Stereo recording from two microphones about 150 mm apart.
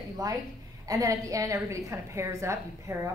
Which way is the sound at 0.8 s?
20° right (ahead or behind).